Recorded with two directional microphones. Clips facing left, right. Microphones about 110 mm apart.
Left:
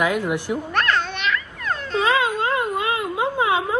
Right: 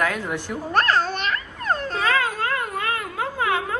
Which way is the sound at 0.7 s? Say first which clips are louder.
Right 4 dB; 35° right (ahead or behind).